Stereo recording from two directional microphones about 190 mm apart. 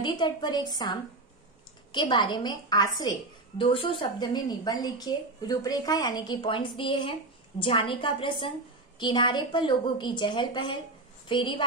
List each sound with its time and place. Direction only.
0.0 s a woman's voice: 25° left (ahead or behind)